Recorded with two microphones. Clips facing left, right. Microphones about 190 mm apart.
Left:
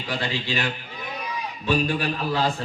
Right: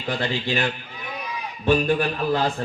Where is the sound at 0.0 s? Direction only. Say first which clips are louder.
Right 3 dB; 50° right (ahead or behind).